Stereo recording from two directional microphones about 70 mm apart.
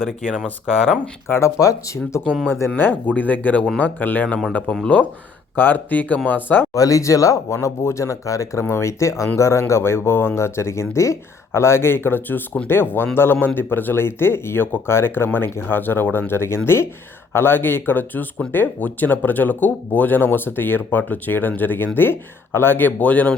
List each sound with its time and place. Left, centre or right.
0.0 s speech: centre
1.3 s speech: left
2.5 s speech: left
6.7 s speech: left